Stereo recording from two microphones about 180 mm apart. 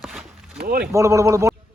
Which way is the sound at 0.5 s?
55° right (ahead or behind).